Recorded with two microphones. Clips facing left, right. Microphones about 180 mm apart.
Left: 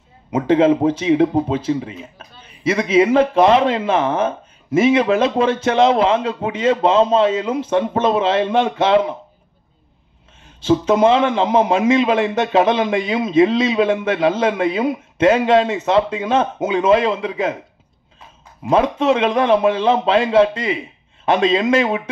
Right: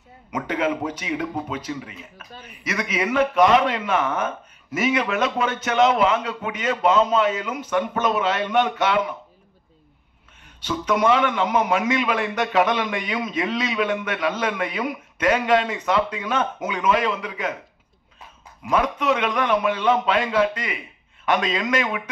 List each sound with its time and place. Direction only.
0.3 s speech: 30° left (ahead or behind)
10.4 s speech: 25° left (ahead or behind)
18.6 s speech: 30° left (ahead or behind)